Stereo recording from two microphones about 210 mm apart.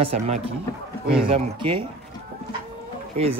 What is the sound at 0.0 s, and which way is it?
Speech, 25° right (ahead or behind).